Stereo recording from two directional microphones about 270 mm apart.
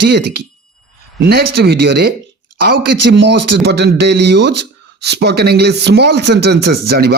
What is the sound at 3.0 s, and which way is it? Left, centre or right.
Speech, right.